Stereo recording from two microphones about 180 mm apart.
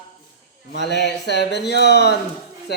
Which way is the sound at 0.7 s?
70° left (ahead or behind).